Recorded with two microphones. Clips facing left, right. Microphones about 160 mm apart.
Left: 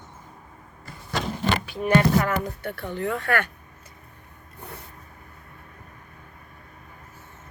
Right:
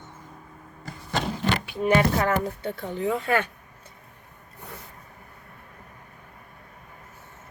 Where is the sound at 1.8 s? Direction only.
25° right (ahead or behind).